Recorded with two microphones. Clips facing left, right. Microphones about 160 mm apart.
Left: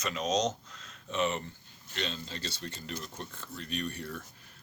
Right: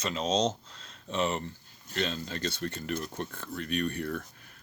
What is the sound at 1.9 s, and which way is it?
Speech, 50° right (ahead or behind).